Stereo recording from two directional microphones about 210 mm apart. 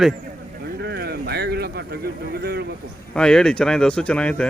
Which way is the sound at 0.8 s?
50° right (ahead or behind).